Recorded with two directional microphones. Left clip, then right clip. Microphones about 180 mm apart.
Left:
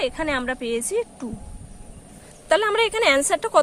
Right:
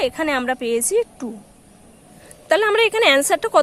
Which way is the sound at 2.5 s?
15° right (ahead or behind).